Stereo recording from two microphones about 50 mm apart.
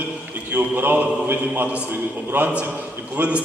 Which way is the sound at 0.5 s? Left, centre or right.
Right.